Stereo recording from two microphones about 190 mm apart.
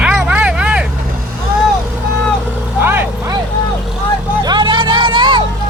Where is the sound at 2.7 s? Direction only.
10° right (ahead or behind).